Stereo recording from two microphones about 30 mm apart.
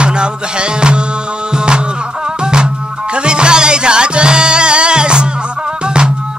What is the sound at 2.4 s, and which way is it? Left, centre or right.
Music, right.